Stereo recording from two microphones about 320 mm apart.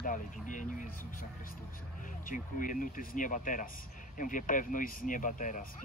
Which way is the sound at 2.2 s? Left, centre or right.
Left.